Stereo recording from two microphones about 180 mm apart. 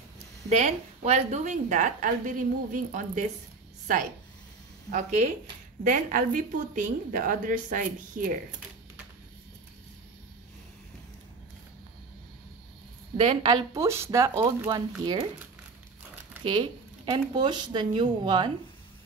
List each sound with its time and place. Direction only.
0.5 s a woman's voice: 40° right (ahead or behind)
4.9 s a woman's voice: 40° right (ahead or behind)
13.2 s speech: 25° right (ahead or behind)
16.4 s speech: 25° right (ahead or behind)